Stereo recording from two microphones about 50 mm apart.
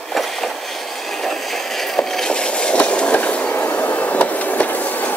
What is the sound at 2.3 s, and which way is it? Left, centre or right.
Train, centre.